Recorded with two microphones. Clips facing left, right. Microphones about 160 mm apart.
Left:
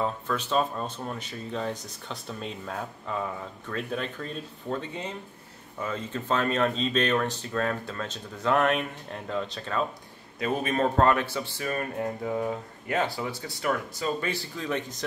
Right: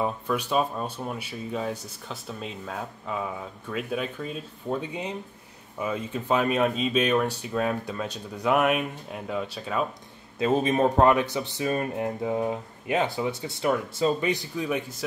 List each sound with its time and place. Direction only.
0.0 s speech: 10° right (ahead or behind)
10.4 s speech: 20° right (ahead or behind)